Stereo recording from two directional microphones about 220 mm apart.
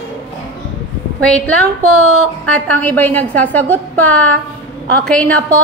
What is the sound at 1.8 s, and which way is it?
Speech, 90° right.